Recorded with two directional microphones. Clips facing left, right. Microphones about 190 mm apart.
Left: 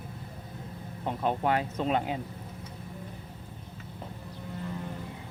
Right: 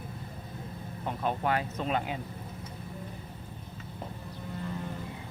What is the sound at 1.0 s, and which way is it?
Speech, 25° left (ahead or behind).